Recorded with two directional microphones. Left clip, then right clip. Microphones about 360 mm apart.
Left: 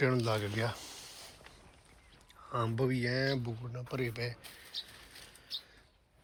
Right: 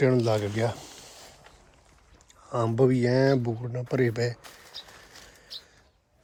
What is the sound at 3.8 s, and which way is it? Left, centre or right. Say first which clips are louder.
Speech: right 11 dB; right.